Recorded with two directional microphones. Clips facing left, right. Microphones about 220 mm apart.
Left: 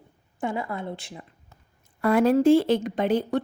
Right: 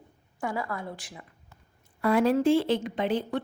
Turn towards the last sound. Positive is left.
turn(degrees=45)  # may be behind; listen again after turning